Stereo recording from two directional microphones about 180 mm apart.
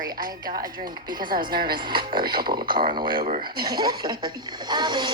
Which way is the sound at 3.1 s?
50° right (ahead or behind).